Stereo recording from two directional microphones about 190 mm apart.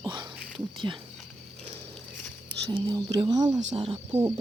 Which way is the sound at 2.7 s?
25° right (ahead or behind).